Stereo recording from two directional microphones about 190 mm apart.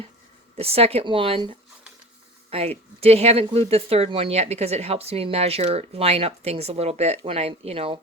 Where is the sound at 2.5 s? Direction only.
30° right (ahead or behind).